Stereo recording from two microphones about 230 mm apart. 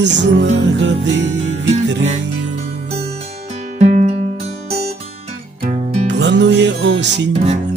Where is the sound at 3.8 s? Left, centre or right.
Right.